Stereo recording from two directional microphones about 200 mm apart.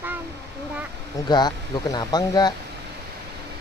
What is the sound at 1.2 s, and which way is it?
Speech, 20° left (ahead or behind).